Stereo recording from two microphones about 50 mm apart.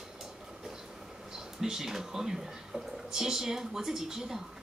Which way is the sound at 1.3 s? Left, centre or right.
Centre.